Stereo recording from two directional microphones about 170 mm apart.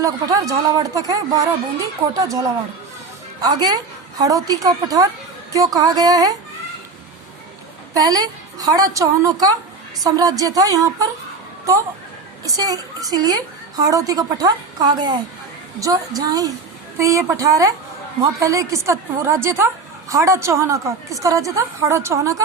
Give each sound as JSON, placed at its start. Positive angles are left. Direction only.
{"t": 0.0, "sound": "a woman's voice", "side_deg": -20}
{"t": 7.9, "sound": "a woman's voice", "side_deg": -20}
{"t": 12.5, "sound": "a woman's voice", "side_deg": -20}